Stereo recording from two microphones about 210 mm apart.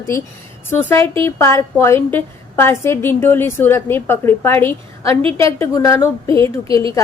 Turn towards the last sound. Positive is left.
turn(degrees=15)  # may be behind; listen again after turning